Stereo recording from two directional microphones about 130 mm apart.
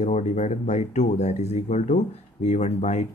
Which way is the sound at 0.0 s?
65° left (ahead or behind).